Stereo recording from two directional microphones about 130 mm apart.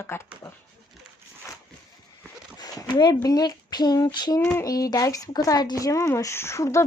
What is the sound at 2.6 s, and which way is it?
Speech, 35° left (ahead or behind).